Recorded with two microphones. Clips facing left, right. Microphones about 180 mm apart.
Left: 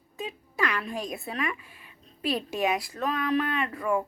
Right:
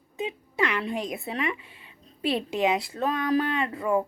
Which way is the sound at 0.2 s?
25° right (ahead or behind).